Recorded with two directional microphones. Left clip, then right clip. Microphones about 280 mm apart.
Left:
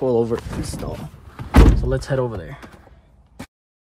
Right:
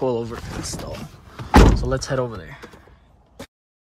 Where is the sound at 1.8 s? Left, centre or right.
Centre.